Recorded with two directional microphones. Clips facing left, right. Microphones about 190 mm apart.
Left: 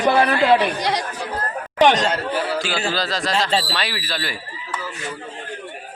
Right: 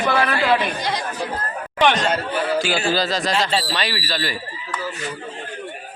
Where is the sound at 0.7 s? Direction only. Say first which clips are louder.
Left 3 dB; 70° left (ahead or behind).